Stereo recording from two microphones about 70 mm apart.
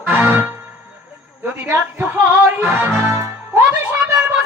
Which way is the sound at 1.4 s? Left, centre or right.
Right.